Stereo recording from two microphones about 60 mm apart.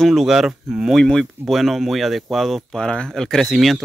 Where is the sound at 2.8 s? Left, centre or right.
Centre.